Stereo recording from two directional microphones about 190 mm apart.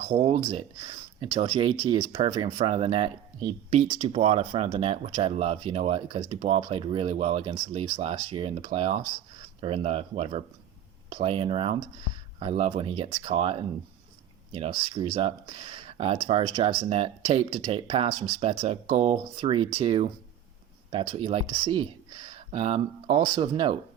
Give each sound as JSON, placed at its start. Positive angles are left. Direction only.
{"t": 0.0, "sound": "speech", "side_deg": -30}